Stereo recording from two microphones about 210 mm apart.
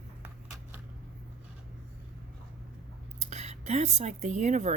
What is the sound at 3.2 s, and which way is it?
Speech, 35° right (ahead or behind).